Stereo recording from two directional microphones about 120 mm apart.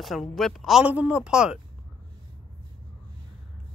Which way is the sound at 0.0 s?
Centre (ahead or behind).